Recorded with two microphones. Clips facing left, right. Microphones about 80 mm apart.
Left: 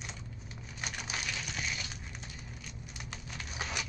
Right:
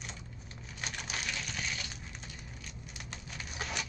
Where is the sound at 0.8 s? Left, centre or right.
Centre.